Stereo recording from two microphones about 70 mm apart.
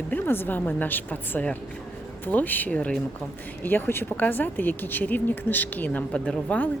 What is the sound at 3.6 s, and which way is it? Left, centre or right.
Speech, left.